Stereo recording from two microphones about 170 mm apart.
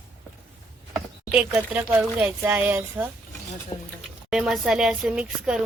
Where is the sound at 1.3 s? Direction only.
5° right (ahead or behind).